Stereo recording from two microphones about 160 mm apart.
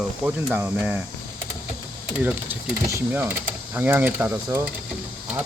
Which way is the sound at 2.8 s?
15° right (ahead or behind).